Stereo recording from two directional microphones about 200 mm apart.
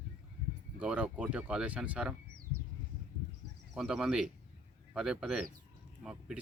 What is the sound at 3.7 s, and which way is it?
Speech, centre (ahead or behind).